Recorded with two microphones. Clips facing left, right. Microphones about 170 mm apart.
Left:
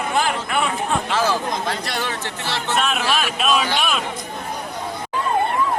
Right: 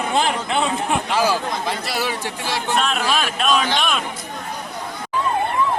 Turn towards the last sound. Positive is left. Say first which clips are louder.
# right 1 dB
turn(degrees=5)  # may be behind; listen again after turning